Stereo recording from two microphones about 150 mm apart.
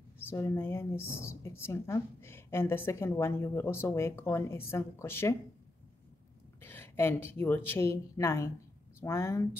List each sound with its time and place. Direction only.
0.3 s a woman's voice: 15° left (ahead or behind)
6.6 s a woman's voice: 15° left (ahead or behind)